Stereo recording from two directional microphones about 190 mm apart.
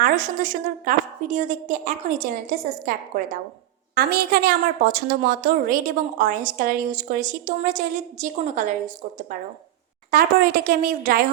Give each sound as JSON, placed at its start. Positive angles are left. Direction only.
{"t": 0.0, "sound": "a woman's voice", "side_deg": -45}
{"t": 3.9, "sound": "a woman's voice", "side_deg": -50}
{"t": 10.1, "sound": "a woman's voice", "side_deg": -50}